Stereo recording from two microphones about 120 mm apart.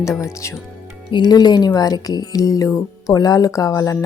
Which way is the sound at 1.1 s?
35° left (ahead or behind).